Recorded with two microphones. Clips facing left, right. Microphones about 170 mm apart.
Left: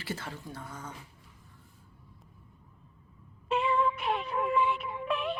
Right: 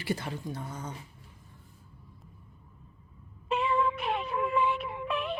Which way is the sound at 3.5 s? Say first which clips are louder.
Even; centre (ahead or behind).